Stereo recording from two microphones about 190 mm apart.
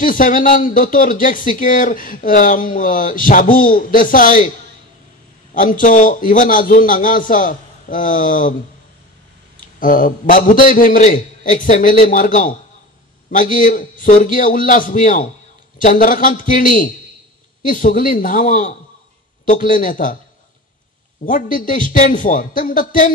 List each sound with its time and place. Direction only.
0.0 s speech: 45° left (ahead or behind)
5.5 s speech: 45° left (ahead or behind)
9.8 s speech: 45° left (ahead or behind)
21.3 s speech: 45° left (ahead or behind)